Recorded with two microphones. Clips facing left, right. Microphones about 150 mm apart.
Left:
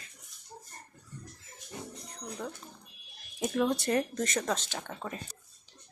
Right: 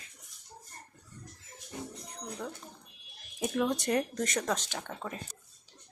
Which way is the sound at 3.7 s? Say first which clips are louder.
Left 1 dB; 15° right (ahead or behind).